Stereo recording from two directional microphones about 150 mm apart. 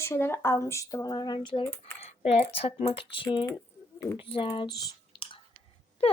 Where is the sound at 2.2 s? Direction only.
40° left (ahead or behind).